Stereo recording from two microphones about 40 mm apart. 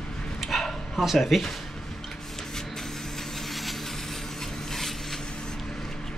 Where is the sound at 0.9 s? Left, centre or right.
Centre.